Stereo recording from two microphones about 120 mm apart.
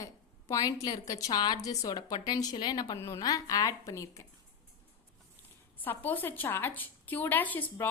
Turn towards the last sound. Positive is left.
turn(degrees=15)  # may be behind; listen again after turning